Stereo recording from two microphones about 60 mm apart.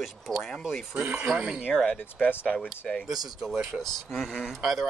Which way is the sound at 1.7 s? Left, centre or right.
Centre.